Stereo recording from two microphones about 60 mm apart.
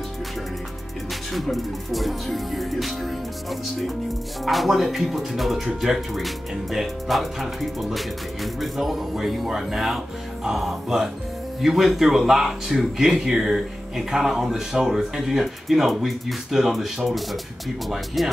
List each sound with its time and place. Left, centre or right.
1.3 s speech: centre
4.5 s speech: centre